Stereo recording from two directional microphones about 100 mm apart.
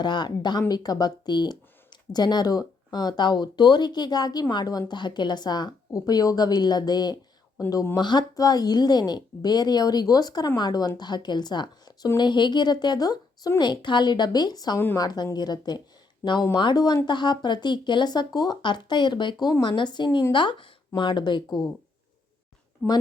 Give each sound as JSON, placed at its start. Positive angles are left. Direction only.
{"t": 0.0, "sound": "a woman's voice", "side_deg": 45}
{"t": 22.8, "sound": "a woman's voice", "side_deg": 20}